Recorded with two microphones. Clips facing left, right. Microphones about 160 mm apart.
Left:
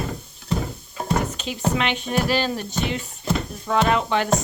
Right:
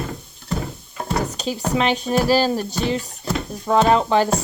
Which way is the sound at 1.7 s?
35° right (ahead or behind).